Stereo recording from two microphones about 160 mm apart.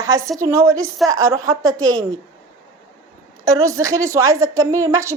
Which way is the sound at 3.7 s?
20° right (ahead or behind).